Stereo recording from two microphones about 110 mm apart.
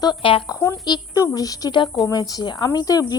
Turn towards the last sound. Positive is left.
turn(degrees=35)  # may be behind; listen again after turning